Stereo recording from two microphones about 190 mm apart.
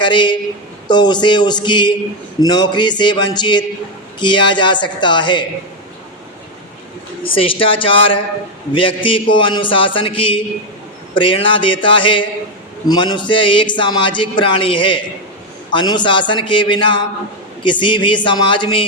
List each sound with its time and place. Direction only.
0.0 s speech: 25° left (ahead or behind)
7.3 s speech: 30° left (ahead or behind)